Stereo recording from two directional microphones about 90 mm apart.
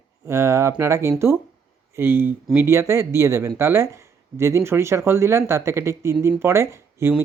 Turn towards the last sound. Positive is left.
turn(degrees=-30)  # may be behind; listen again after turning